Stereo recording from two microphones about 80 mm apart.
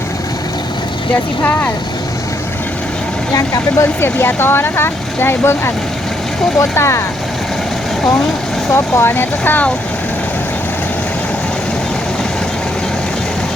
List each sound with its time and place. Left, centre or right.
1.4 s speech: left
3.3 s speech: left
4.0 s speech: left
8.7 s speech: left